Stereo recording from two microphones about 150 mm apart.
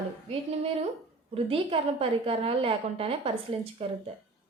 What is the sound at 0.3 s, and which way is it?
A woman's voice, 40° right (ahead or behind).